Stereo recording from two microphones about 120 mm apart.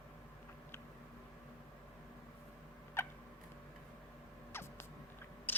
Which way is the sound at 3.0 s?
20° left (ahead or behind).